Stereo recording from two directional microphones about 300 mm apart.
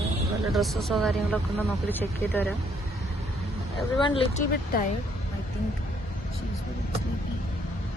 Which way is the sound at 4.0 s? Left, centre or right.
Left.